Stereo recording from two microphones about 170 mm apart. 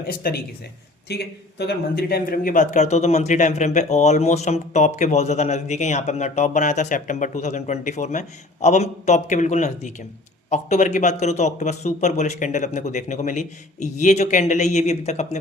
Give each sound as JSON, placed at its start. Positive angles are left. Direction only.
{"t": 0.1, "sound": "speech", "side_deg": 65}
{"t": 1.0, "sound": "a man's voice", "side_deg": 75}